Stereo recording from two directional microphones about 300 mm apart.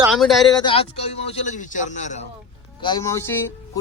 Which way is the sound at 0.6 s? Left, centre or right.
Centre.